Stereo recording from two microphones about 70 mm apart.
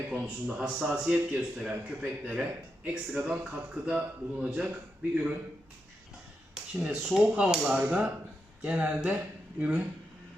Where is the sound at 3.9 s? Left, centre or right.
Right.